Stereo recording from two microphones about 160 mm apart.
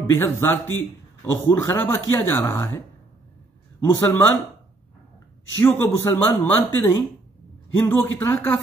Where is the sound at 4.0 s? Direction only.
15° left (ahead or behind).